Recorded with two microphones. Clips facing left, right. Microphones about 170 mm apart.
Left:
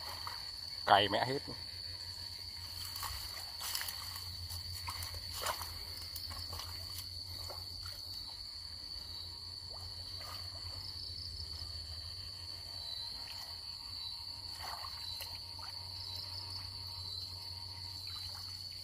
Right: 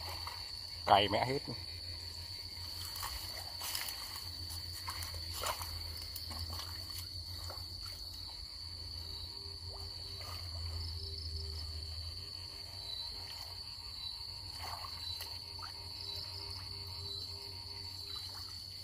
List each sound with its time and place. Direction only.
0.8 s speech: 5° right (ahead or behind)